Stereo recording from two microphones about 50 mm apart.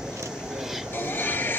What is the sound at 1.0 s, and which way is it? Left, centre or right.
Music, left.